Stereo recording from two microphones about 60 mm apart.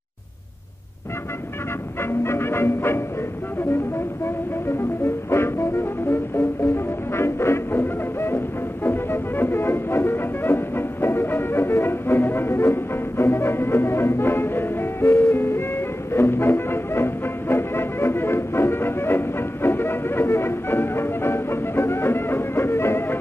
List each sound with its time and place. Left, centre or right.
2.0 s music: left
4.2 s music: left
15.0 s music: left
15.3 s music: left